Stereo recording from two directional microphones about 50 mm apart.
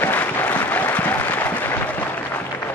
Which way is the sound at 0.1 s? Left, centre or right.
Left.